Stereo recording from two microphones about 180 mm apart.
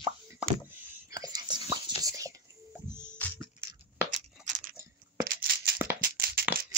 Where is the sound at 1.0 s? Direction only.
20° right (ahead or behind).